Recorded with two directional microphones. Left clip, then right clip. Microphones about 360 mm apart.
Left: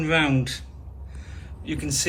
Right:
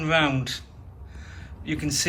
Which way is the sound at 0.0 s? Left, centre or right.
Centre.